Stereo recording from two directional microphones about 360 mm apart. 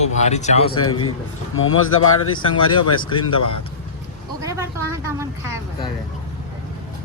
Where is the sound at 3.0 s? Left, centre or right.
Centre.